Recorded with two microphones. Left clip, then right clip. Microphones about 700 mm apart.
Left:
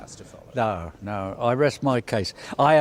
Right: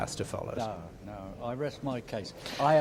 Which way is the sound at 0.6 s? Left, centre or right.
Left.